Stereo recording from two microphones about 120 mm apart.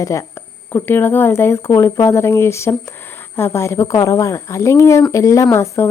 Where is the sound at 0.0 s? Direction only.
25° left (ahead or behind).